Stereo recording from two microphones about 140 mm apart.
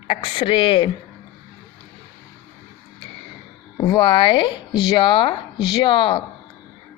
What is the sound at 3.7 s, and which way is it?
Speech, 30° left (ahead or behind).